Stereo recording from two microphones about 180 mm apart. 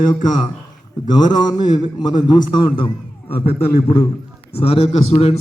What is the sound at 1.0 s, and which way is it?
A man's voice, 25° left (ahead or behind).